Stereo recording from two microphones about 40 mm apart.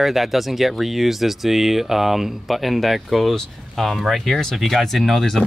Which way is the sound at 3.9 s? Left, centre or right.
Centre.